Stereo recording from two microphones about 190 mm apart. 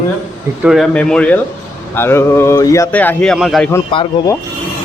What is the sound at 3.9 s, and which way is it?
Speech, 25° left (ahead or behind).